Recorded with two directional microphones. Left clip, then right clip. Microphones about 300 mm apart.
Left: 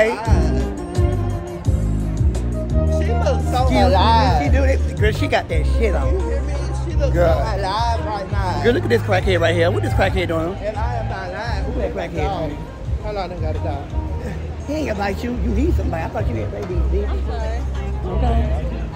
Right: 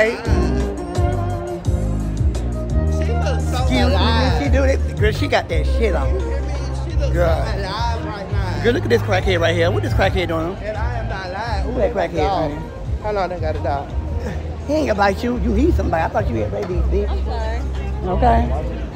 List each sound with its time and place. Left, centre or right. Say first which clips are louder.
0.1 s music: even; left
0.6 s music: right 1 dB; centre
3.0 s music: left 2 dB; left
4.5 s speech: right 2 dB; centre
7.2 s speech: left 2 dB; centre
7.4 s music: left 3 dB; centre
8.6 s speech: right 1 dB; centre
11.3 s speech: right 3 dB; centre